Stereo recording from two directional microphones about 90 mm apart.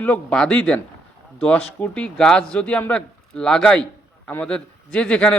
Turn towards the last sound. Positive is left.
turn(degrees=10)  # may be behind; listen again after turning